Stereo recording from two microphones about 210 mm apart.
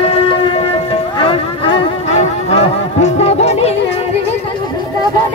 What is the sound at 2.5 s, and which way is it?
Music, 30° left (ahead or behind).